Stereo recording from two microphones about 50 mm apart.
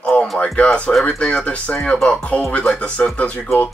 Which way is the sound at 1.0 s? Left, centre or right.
Left.